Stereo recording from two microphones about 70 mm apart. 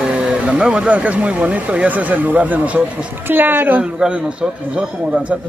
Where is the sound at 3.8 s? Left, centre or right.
Centre.